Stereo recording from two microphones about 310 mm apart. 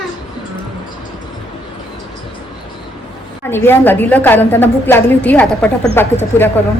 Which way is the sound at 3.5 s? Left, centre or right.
Centre.